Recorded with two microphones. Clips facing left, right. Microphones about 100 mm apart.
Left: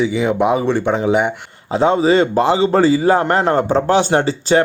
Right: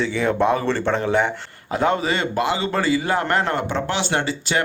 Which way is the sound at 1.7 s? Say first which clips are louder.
Left 7 dB; 25° left (ahead or behind).